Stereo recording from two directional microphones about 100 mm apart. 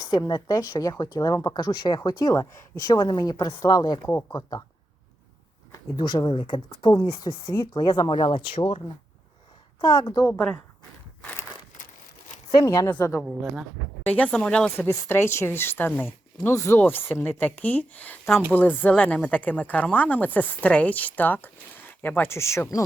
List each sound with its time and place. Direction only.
0.0 s a woman's voice: 40° left (ahead or behind)
4.0 s a woman's voice: 25° left (ahead or behind)
4.4 s a woman's voice: 45° left (ahead or behind)
6.0 s a woman's voice: 50° left (ahead or behind)
6.9 s a woman's voice: 45° left (ahead or behind)
8.1 s speech: 65° left (ahead or behind)
9.8 s a woman's voice: 45° left (ahead or behind)
10.3 s speech: 10° left (ahead or behind)
12.6 s speech: 30° left (ahead or behind)
12.9 s a woman's voice: 20° left (ahead or behind)
14.8 s a woman's voice: 25° left (ahead or behind)